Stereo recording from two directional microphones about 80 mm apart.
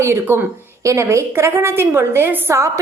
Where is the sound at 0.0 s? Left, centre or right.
Right.